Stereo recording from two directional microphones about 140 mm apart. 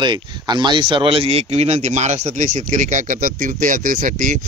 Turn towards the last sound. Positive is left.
turn(degrees=-70)  # may be behind; listen again after turning